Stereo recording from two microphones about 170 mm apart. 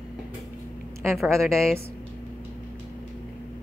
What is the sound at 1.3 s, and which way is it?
Speech, 15° right (ahead or behind).